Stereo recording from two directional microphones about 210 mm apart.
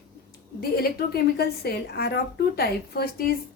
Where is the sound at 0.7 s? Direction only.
45° left (ahead or behind).